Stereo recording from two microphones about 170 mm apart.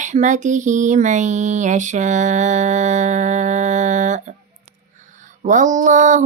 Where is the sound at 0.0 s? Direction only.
45° right (ahead or behind).